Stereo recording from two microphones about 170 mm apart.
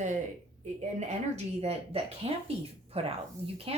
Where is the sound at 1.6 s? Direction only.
35° right (ahead or behind).